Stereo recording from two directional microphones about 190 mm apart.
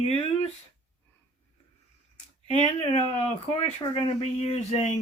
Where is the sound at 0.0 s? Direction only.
35° left (ahead or behind).